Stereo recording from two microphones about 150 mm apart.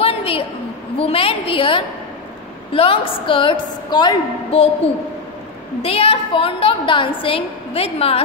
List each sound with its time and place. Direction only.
0.0 s a sound: 40° left (ahead or behind)
0.9 s a woman's voice: 40° left (ahead or behind)
5.8 s a woman's voice: 40° left (ahead or behind)